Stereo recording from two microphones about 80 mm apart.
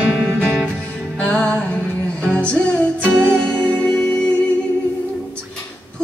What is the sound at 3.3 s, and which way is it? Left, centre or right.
Music, centre.